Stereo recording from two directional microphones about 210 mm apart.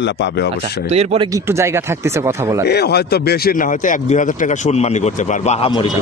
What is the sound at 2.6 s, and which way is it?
Speech, 50° left (ahead or behind).